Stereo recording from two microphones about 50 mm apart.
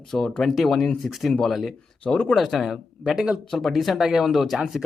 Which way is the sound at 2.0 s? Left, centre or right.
Centre.